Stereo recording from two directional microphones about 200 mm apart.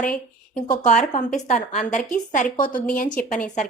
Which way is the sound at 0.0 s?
40° left (ahead or behind).